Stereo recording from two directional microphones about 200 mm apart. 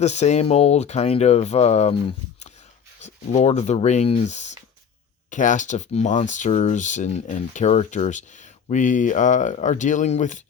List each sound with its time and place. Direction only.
0.0 s speech: 35° left (ahead or behind)